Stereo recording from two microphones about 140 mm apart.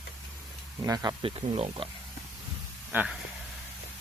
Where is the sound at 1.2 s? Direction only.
40° right (ahead or behind).